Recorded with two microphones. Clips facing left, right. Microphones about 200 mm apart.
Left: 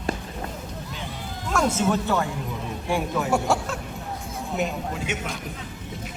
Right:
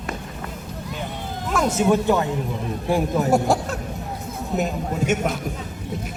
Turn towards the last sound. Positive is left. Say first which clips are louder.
# right 7 dB
turn(degrees=-45)  # may be behind; listen again after turning